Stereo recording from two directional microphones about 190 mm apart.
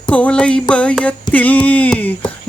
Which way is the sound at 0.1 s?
5° left (ahead or behind).